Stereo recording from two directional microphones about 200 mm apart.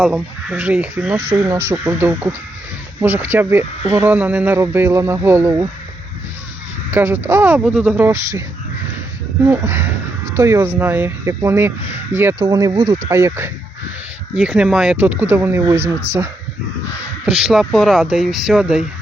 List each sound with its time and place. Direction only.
0.0 s speech: 5° right (ahead or behind)
6.9 s speech: 10° right (ahead or behind)
14.3 s speech: 5° right (ahead or behind)
15.8 s speech: 90° right
17.2 s speech: 5° right (ahead or behind)